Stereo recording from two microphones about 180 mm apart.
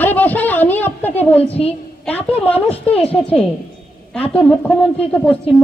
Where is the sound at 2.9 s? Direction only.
10° left (ahead or behind).